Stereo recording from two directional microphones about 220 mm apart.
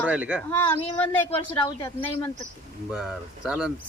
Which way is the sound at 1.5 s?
10° left (ahead or behind).